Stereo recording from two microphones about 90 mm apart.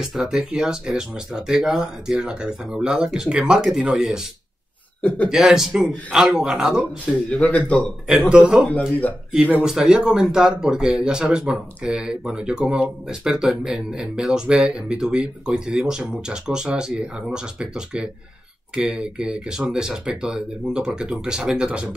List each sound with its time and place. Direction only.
0.0 s speech: 5° right (ahead or behind)
5.0 s speech: 15° left (ahead or behind)
5.3 s speech: 5° right (ahead or behind)
7.1 s speech: 15° left (ahead or behind)
7.8 s speech: 5° right (ahead or behind)